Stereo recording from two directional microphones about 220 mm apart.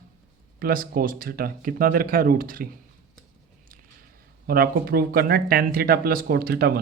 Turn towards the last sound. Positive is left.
turn(degrees=-45)  # may be behind; listen again after turning